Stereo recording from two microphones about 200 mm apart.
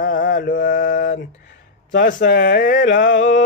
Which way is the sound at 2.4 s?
45° left (ahead or behind).